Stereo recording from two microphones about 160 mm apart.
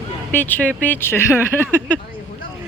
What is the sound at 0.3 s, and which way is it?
Speech, 10° left (ahead or behind).